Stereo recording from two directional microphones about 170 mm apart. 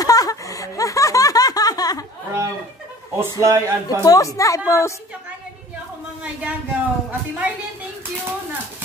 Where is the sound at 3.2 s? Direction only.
15° right (ahead or behind).